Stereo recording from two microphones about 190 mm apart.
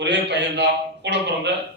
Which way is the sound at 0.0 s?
65° right (ahead or behind).